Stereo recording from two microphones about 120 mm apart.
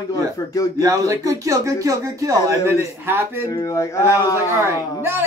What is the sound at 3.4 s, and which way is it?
Speech, 25° left (ahead or behind).